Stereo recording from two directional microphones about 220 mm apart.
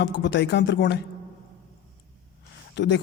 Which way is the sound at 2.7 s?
55° left (ahead or behind).